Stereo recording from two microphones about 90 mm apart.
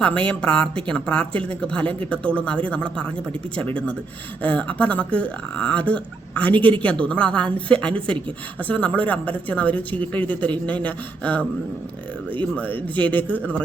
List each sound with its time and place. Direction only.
0.0 s speech: 15° left (ahead or behind)
12.5 s speech: 15° left (ahead or behind)